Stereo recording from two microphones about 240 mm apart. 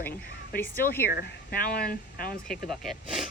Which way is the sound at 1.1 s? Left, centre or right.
Left.